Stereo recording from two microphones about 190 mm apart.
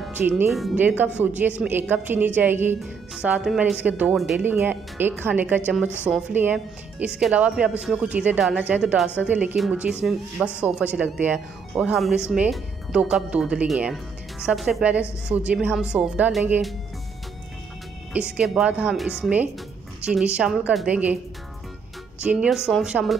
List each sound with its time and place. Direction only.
0.0 s music: 10° right (ahead or behind)
0.5 s speech: 5° right (ahead or behind)
18.1 s speech: 5° right (ahead or behind)
22.2 s speech: 5° right (ahead or behind)